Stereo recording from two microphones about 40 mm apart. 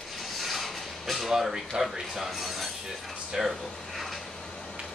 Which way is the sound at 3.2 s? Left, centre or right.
Centre.